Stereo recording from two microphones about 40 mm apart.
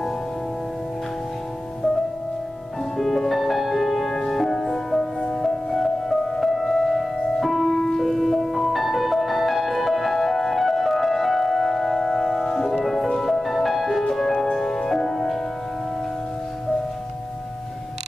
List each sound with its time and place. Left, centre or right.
3.0 s music: centre